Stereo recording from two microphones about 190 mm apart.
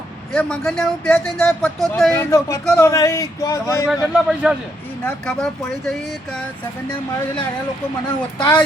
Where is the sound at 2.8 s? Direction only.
15° left (ahead or behind).